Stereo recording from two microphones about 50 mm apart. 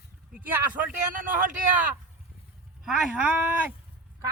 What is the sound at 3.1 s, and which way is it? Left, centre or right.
Speech, right.